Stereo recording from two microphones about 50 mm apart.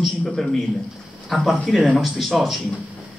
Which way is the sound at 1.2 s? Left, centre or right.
Centre.